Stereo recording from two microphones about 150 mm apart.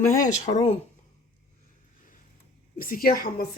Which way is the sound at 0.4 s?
50° left (ahead or behind).